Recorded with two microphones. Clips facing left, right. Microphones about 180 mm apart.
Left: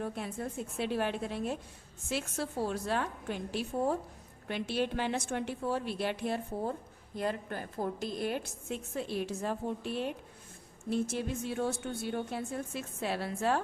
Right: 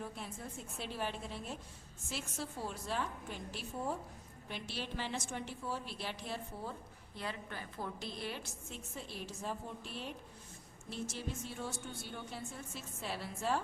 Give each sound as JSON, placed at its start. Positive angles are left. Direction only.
{"t": 0.0, "sound": "a woman's voice", "side_deg": 65}
{"t": 8.7, "sound": "a woman's voice", "side_deg": 65}